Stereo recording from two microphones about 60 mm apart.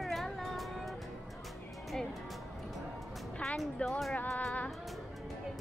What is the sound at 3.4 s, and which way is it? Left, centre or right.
Speech, centre.